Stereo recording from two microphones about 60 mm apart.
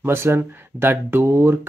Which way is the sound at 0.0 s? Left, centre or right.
Right.